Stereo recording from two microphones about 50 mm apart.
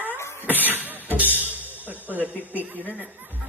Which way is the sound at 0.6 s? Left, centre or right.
Right.